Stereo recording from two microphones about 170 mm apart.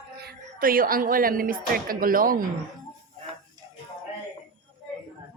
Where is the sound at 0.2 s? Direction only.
65° right (ahead or behind).